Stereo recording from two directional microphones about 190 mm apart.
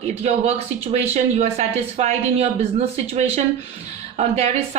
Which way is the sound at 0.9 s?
35° right (ahead or behind).